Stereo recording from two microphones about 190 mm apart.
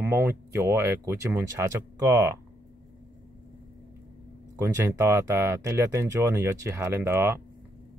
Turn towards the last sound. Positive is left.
turn(degrees=-10)  # may be behind; listen again after turning